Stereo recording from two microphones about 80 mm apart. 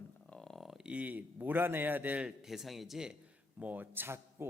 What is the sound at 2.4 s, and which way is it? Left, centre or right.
Speech, centre.